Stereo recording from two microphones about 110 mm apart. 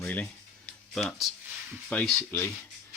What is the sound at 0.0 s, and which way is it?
Speech, 15° left (ahead or behind).